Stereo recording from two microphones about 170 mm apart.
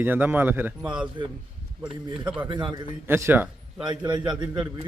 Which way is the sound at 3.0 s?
15° right (ahead or behind).